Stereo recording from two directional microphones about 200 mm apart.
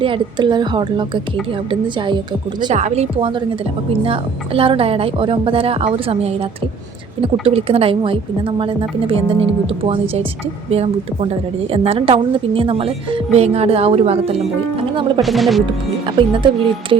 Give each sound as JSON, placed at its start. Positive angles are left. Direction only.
{"t": 0.0, "sound": "a woman's voice", "side_deg": -25}
{"t": 2.7, "sound": "a woman's voice", "side_deg": -35}
{"t": 15.2, "sound": "speech", "side_deg": 0}
{"t": 16.0, "sound": "a woman's voice", "side_deg": -25}